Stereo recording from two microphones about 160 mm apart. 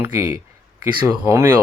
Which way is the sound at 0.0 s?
15° right (ahead or behind).